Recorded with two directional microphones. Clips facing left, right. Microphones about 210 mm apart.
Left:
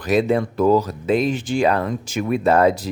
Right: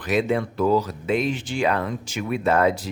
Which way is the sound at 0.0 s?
40° left (ahead or behind).